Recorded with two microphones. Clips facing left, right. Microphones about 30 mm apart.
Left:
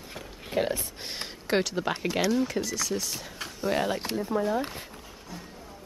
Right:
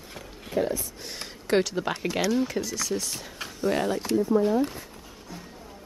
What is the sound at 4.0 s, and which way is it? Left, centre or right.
Speech, left.